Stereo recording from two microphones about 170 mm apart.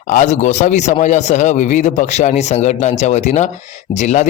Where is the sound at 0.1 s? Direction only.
45° left (ahead or behind).